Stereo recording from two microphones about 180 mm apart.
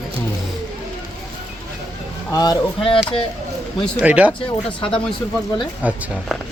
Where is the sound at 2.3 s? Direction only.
20° left (ahead or behind).